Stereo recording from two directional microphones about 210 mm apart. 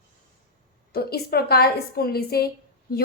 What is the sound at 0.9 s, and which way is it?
A woman's voice, 50° left (ahead or behind).